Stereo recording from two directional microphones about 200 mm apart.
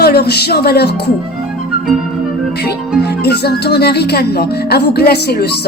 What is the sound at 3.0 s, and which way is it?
A woman's voice, 55° left (ahead or behind).